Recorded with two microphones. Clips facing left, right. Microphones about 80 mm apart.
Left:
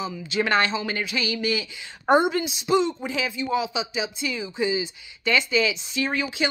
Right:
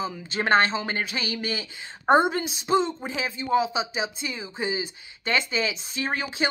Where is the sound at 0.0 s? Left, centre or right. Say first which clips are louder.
Left 2 dB; right.